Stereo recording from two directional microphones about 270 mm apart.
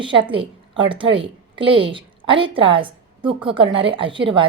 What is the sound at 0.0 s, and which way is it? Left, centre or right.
A woman's voice, centre.